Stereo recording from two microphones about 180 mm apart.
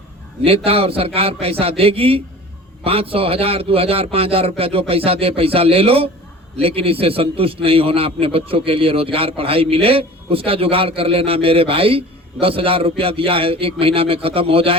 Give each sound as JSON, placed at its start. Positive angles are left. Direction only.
{"t": 0.4, "sound": "a man's voice", "side_deg": -30}